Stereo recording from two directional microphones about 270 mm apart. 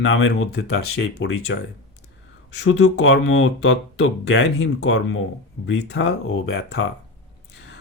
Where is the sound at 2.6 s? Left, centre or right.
Left.